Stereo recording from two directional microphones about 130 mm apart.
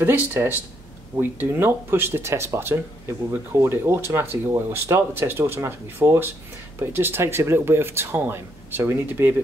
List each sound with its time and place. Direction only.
0.0 s speech: 20° right (ahead or behind)